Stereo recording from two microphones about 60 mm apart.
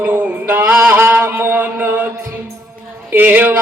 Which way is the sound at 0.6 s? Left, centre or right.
Centre.